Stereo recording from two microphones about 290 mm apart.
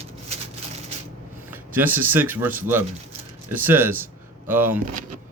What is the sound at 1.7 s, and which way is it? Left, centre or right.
Speech, centre.